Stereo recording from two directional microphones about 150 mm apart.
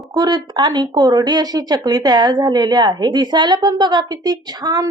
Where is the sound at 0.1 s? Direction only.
25° right (ahead or behind).